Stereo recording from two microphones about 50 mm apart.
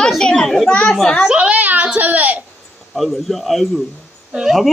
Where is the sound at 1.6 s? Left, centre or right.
Right.